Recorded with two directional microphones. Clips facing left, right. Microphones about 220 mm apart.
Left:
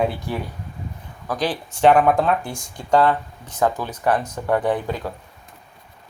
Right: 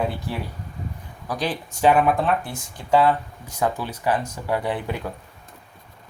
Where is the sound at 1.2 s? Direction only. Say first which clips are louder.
Left 3 dB; 40° left (ahead or behind).